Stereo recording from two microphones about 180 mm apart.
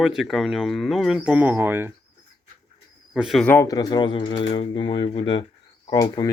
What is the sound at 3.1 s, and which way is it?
Speech, centre (ahead or behind).